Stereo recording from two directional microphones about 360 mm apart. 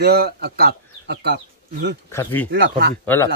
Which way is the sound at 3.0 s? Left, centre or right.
Centre.